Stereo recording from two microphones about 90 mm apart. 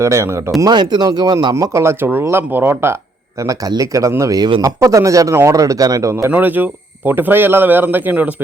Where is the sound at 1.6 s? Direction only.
35° right (ahead or behind).